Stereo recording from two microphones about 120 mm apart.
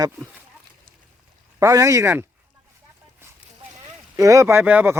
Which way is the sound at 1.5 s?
25° right (ahead or behind).